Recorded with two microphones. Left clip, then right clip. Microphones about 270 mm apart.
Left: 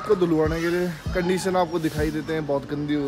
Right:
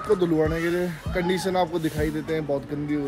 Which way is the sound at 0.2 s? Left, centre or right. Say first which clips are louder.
Left 1 dB; centre.